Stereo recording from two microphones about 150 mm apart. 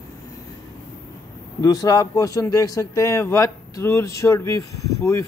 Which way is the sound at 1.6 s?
25° left (ahead or behind).